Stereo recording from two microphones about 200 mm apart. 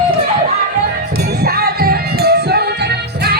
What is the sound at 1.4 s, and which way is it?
Music, 50° right (ahead or behind).